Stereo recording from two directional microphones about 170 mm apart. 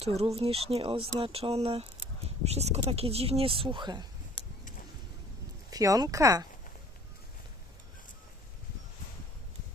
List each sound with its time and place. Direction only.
0.0 s speech: 35° right (ahead or behind)
5.7 s speech: 20° right (ahead or behind)